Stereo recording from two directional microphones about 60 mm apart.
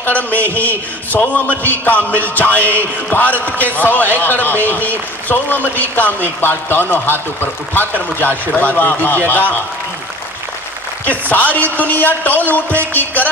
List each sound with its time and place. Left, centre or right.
0.0 s a man's voice: left
11.1 s a man's voice: left